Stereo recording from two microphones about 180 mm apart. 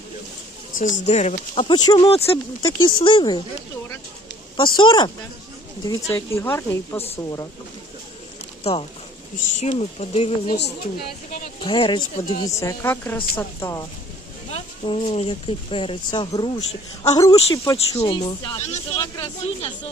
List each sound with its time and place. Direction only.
0.8 s speech: 40° left (ahead or behind)
1.6 s speech: 20° left (ahead or behind)
2.6 s speech: 20° left (ahead or behind)
4.5 s a woman's voice: 30° left (ahead or behind)
9.6 s speech: 40° left (ahead or behind)
11.6 s speech: 30° left (ahead or behind)
12.5 s a woman's voice: 15° left (ahead or behind)
15.0 s speech: 30° left (ahead or behind)
17.7 s speech: 30° left (ahead or behind)
18.6 s speech: 40° left (ahead or behind)
18.9 s speech: 25° left (ahead or behind)